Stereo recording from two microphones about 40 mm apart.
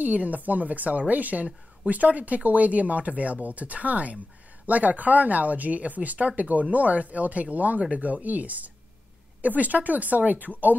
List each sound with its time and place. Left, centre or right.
0.0 s speech: right